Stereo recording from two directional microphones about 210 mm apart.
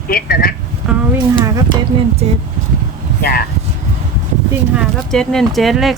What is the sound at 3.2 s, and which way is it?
Speech, 45° left (ahead or behind).